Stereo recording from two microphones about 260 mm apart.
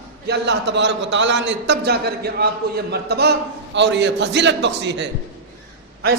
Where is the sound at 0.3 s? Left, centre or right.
Right.